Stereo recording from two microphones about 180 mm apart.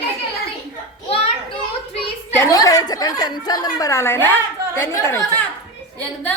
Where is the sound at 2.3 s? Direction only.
15° left (ahead or behind).